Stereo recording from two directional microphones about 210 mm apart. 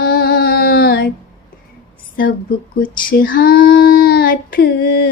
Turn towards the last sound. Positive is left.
turn(degrees=50)  # may be behind; listen again after turning